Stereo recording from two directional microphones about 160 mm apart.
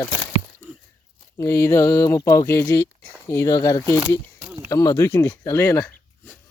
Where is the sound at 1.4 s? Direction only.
20° left (ahead or behind).